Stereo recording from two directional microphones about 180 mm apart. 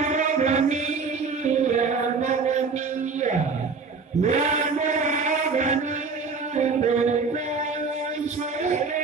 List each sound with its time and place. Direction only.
0.1 s music: 40° right (ahead or behind)
4.2 s chant: 40° right (ahead or behind)
6.5 s music: 40° right (ahead or behind)